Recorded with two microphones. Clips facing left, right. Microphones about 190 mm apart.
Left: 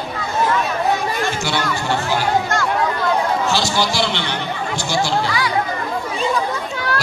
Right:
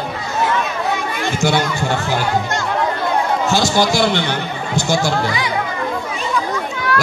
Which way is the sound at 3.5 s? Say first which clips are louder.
Right 4 dB; 50° right (ahead or behind).